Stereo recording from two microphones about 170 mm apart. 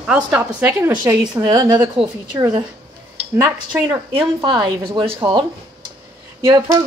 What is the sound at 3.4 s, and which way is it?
Speech, 15° right (ahead or behind).